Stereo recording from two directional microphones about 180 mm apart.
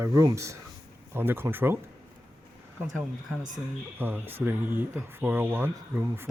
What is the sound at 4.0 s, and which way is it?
A man's voice, 10° right (ahead or behind).